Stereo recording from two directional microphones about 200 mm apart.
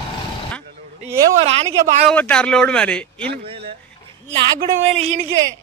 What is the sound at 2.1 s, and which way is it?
Speech, 5° left (ahead or behind).